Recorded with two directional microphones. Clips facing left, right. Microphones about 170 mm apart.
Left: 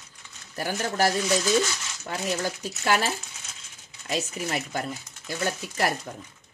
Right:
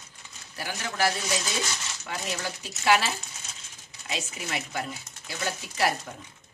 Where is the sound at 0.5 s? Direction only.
45° left (ahead or behind).